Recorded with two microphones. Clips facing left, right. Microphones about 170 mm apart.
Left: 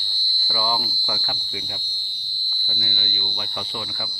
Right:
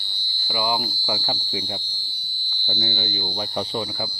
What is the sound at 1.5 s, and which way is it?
Speech, 30° right (ahead or behind).